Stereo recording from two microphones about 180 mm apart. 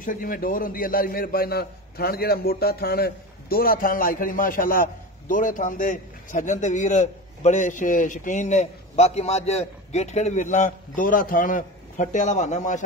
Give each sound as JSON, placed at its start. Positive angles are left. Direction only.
{"t": 0.0, "sound": "a man's voice", "side_deg": 50}